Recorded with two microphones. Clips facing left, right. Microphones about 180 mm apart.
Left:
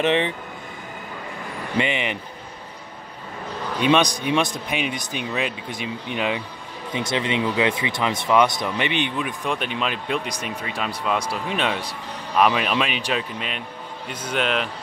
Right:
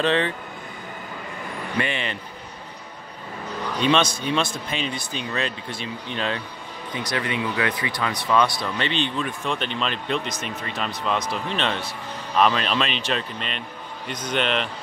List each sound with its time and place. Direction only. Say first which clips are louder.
0.0 s speech: left 1 dB; 20° left (ahead or behind)
1.8 s speech: left 3 dB; 15° left (ahead or behind)
3.8 s speech: left 2 dB; 15° left (ahead or behind)
6.9 s a man's voice: left 3 dB; 25° left (ahead or behind); by 14.7 s 5° left (ahead or behind)